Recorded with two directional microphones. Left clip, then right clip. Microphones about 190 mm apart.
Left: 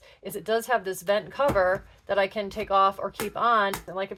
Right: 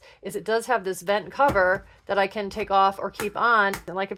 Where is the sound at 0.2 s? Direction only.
30° right (ahead or behind).